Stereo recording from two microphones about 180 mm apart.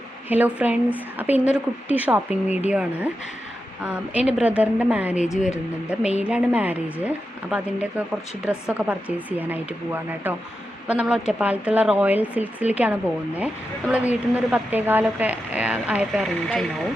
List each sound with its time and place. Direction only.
0.3 s a woman's voice: 10° right (ahead or behind)